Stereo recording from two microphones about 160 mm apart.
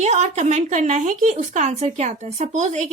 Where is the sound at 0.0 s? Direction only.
45° right (ahead or behind).